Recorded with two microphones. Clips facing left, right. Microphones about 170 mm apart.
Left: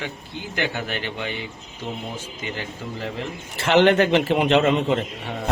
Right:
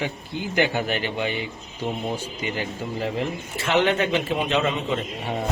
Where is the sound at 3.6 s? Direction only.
80° left.